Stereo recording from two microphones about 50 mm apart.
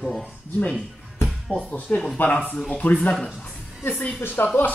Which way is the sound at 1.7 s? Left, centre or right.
Left.